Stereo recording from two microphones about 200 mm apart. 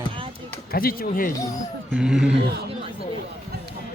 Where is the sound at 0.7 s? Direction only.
45° left (ahead or behind).